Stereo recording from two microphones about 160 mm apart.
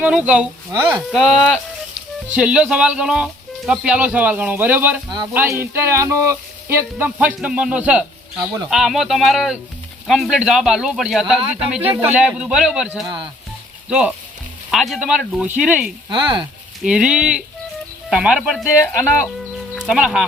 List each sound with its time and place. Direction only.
0.0 s speech: 5° right (ahead or behind)
16.0 s speech: 30° right (ahead or behind)
16.8 s speech: 5° right (ahead or behind)
19.8 s speech: 5° right (ahead or behind)